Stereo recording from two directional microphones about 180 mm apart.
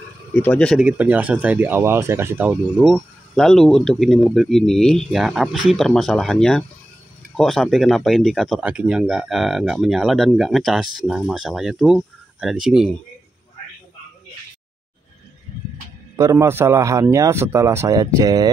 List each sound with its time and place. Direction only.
0.3 s speech: 10° left (ahead or behind)
0.7 s speech: 10° right (ahead or behind)
16.2 s a man's voice: 15° right (ahead or behind)